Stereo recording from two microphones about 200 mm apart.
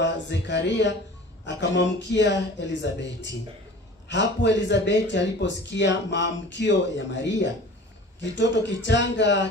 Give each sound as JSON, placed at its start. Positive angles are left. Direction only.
{"t": 0.0, "sound": "speech", "side_deg": 60}